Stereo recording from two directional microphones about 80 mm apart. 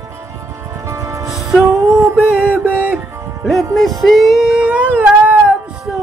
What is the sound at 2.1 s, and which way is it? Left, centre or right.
Music, centre.